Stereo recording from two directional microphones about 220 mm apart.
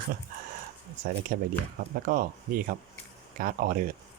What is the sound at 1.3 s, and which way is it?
Speech, 45° right (ahead or behind).